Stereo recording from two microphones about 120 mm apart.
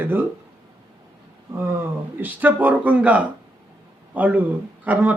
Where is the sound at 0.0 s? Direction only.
15° right (ahead or behind).